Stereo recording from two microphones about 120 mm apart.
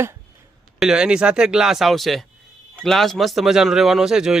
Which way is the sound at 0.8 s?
5° right (ahead or behind).